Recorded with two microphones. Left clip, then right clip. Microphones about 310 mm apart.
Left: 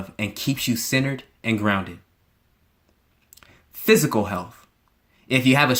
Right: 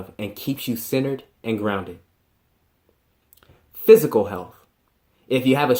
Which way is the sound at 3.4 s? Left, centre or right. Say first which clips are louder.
Left 3 dB; left.